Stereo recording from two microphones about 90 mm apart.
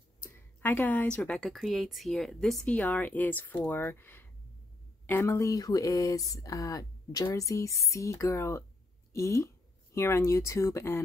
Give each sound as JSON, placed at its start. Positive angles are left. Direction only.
{"t": 0.2, "sound": "a sound", "side_deg": 20}
{"t": 1.4, "sound": "speech", "side_deg": 0}
{"t": 2.6, "sound": "speech", "side_deg": 15}